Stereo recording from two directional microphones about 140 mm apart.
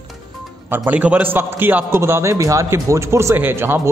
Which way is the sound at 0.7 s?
10° right (ahead or behind).